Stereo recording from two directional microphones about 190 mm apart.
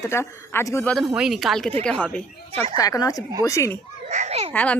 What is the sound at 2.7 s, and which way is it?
A woman's voice, 20° left (ahead or behind).